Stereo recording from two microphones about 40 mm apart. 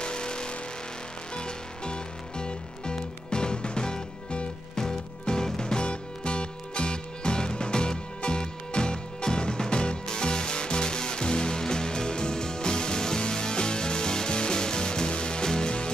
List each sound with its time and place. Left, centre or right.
0.0 s vehicle: left
1.3 s music: left